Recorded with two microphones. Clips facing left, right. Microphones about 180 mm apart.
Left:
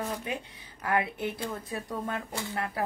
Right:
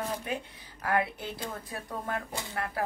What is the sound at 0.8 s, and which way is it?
Speech, 20° left (ahead or behind).